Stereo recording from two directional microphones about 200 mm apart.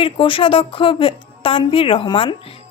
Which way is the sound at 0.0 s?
25° left (ahead or behind).